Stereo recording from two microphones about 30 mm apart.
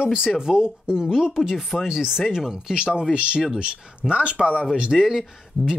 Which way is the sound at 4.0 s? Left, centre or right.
Right.